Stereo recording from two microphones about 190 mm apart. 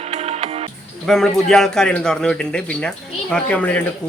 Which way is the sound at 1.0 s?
Centre (ahead or behind).